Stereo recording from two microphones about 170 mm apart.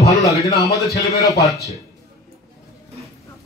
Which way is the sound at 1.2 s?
20° left (ahead or behind).